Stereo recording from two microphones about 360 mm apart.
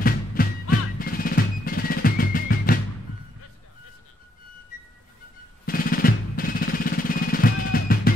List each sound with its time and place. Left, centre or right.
0.0 s music: left
5.7 s drum: left